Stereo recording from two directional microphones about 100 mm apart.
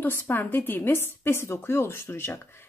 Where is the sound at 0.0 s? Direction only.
20° left (ahead or behind).